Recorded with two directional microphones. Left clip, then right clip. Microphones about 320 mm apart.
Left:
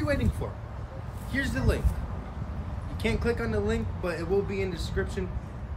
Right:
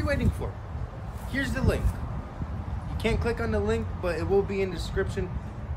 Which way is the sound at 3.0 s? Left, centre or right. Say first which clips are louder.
Right 1 dB; centre.